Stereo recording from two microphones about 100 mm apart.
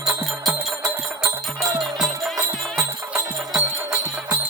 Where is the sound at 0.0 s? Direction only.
35° right (ahead or behind).